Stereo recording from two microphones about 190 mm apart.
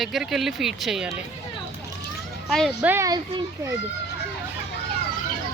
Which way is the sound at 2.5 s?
Centre (ahead or behind).